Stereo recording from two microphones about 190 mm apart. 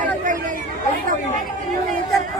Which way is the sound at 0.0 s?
45° right (ahead or behind).